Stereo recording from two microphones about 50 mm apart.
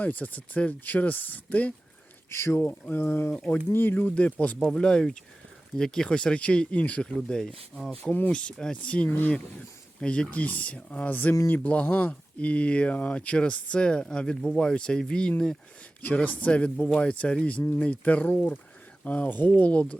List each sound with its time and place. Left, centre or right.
0.0 s speech: left
2.3 s speech: left
3.8 s speech: left
4.7 s speech: centre
7.2 s speech: centre
8.1 s speech: centre
8.7 s speech: left
9.0 s speech: left
10.0 s speech: centre
16.2 s speech: left